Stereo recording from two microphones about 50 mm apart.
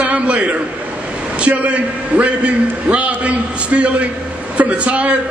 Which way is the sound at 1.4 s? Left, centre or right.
Right.